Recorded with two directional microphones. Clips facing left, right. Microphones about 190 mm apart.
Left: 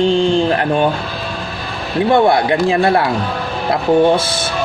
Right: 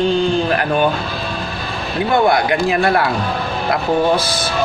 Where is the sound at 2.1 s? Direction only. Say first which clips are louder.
Left 2 dB; 30° left (ahead or behind).